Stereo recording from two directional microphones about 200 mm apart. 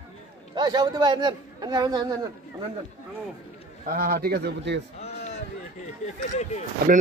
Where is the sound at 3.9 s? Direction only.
45° right (ahead or behind).